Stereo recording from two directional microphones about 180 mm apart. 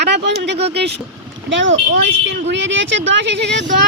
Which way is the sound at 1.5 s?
90° right.